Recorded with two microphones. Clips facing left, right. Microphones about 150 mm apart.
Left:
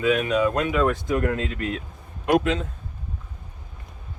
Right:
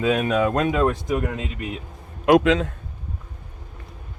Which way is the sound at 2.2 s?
90° right.